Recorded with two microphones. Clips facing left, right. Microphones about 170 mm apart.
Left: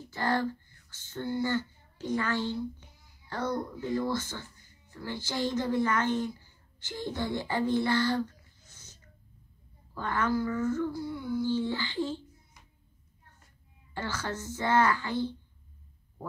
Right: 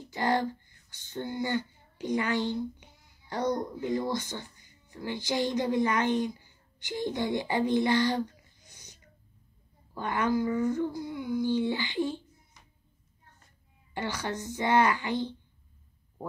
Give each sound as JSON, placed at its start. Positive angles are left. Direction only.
{"t": 0.1, "sound": "speech", "side_deg": -15}
{"t": 13.9, "sound": "speech", "side_deg": -15}